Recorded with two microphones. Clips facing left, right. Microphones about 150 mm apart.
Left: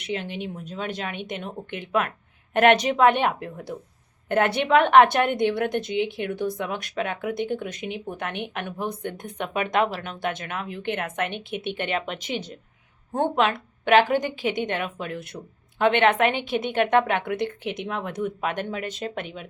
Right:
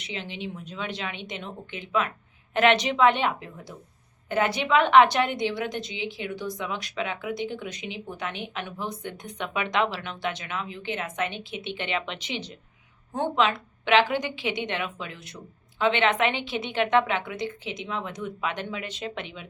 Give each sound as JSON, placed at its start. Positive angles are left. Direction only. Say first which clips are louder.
{"t": 0.0, "sound": "a woman's voice", "louder": "left 5 dB", "side_deg": 50}